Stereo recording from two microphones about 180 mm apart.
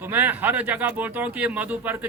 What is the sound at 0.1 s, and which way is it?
Speech, 10° right (ahead or behind).